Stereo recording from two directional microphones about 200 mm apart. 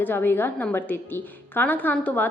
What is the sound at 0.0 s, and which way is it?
A woman's voice, 10° left (ahead or behind).